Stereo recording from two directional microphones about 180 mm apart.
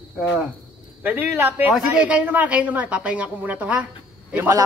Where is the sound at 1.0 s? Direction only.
10° right (ahead or behind).